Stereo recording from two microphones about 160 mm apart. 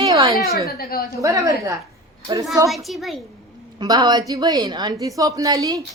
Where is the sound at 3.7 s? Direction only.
25° right (ahead or behind).